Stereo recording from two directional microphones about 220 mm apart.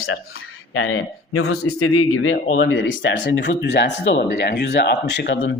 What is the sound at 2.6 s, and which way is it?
Speech, 60° left (ahead or behind).